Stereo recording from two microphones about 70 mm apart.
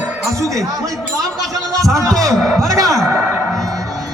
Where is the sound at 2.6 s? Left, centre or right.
Right.